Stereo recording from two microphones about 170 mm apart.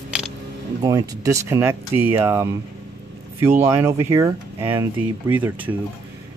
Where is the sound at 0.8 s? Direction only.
20° right (ahead or behind).